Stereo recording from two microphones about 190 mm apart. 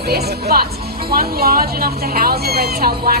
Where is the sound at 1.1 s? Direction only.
55° right (ahead or behind).